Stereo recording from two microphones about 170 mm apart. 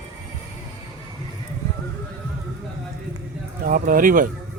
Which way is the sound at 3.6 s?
55° right (ahead or behind).